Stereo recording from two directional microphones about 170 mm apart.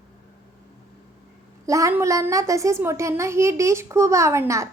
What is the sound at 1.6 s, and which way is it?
A woman's voice, 20° right (ahead or behind).